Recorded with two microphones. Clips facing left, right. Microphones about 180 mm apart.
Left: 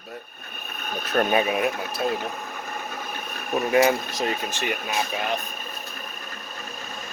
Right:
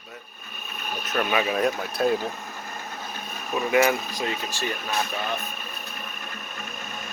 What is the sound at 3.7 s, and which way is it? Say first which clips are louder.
Speech: left 1 dB; 30° left (ahead or behind).